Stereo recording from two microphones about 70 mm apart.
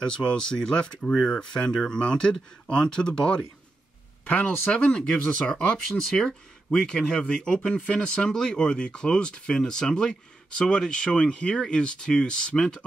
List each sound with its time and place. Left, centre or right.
0.0 s speech: centre